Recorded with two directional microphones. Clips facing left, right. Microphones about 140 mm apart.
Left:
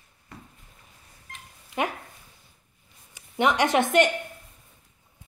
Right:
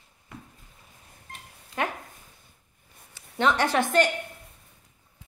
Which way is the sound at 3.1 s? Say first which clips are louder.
Left 1 dB; 15° left (ahead or behind).